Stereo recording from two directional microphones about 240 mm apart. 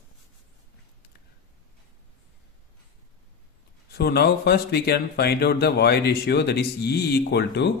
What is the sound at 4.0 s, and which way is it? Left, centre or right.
Speech, left.